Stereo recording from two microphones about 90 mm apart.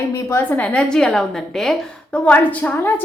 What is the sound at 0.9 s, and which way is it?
A woman's voice, 5° left (ahead or behind).